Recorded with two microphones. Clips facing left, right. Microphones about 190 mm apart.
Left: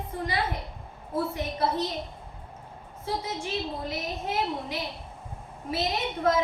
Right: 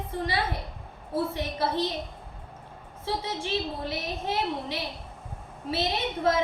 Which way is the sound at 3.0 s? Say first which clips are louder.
Right 1 dB; 30° right (ahead or behind).